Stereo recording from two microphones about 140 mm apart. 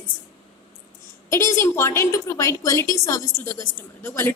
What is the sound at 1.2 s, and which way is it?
A woman's voice, 20° left (ahead or behind).